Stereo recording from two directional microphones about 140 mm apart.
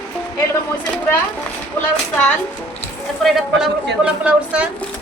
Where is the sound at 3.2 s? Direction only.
5° right (ahead or behind).